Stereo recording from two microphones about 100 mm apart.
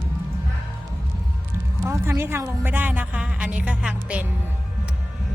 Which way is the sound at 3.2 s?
10° right (ahead or behind).